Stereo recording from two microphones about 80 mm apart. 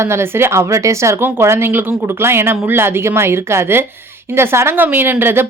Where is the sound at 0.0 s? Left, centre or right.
Right.